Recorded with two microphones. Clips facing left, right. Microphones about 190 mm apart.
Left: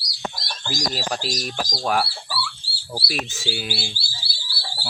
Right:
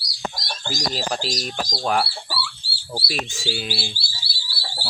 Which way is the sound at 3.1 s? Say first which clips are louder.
Even; 5° left (ahead or behind).